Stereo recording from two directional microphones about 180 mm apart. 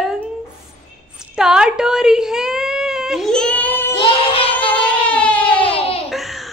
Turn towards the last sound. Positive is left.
turn(degrees=0)  # may be behind; listen again after turning